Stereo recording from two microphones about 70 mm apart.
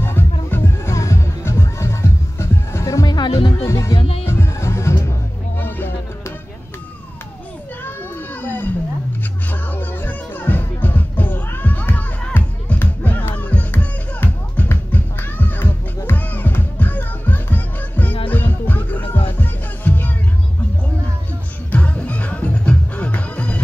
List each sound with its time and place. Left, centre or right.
0.0 s music: left
5.6 s music: left
8.4 s roaring cats: left
9.5 s music: left
21.7 s music: left